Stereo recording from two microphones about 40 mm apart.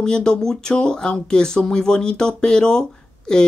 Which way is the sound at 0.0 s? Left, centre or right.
Centre.